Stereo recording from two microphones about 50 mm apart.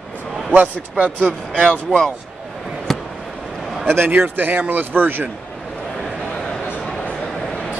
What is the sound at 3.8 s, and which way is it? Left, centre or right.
Speech, right.